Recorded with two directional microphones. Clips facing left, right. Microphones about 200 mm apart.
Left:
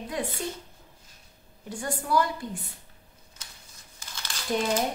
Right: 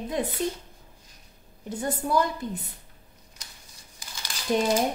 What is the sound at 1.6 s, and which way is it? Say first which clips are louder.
Speech: right 3 dB; 20° right (ahead or behind).